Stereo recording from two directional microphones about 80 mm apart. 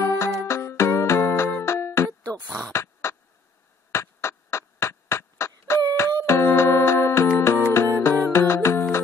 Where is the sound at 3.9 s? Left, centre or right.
Left.